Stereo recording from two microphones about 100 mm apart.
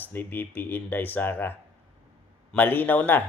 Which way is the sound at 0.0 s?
20° left (ahead or behind).